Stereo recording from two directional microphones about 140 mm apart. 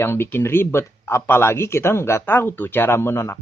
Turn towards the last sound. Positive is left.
turn(degrees=15)  # may be behind; listen again after turning